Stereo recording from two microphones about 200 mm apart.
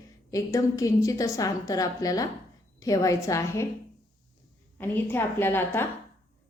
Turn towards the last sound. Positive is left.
turn(degrees=10)  # may be behind; listen again after turning